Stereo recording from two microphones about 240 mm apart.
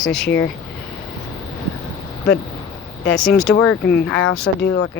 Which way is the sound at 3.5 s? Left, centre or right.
Left.